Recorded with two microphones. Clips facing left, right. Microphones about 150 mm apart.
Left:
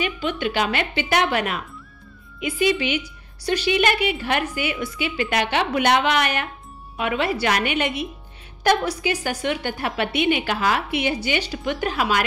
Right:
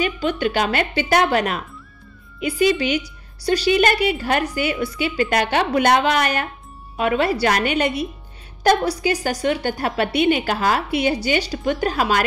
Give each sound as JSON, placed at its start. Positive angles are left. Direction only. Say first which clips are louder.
{"t": 0.0, "sound": "a woman's voice", "louder": "right 4 dB", "side_deg": -40}